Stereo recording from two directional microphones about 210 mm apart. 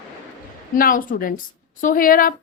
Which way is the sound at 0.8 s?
40° left (ahead or behind).